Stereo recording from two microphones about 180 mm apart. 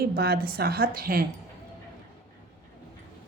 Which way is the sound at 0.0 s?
55° right (ahead or behind).